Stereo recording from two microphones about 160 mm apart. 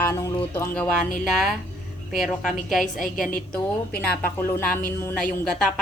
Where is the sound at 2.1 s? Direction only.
5° left (ahead or behind).